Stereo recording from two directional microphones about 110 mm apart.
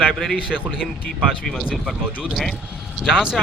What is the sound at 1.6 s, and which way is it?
A man's voice, 10° right (ahead or behind).